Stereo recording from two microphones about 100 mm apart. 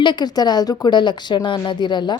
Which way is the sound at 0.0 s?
50° left (ahead or behind).